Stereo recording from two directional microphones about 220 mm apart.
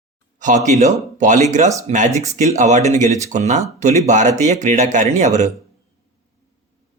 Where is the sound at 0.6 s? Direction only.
30° right (ahead or behind).